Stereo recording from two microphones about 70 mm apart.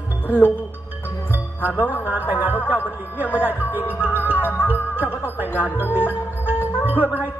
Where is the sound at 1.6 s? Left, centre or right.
Left.